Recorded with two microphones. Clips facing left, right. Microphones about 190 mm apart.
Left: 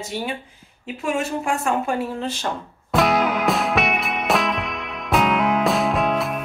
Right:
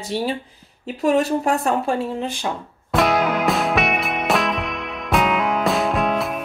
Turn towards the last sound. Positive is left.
turn(degrees=0)  # may be behind; listen again after turning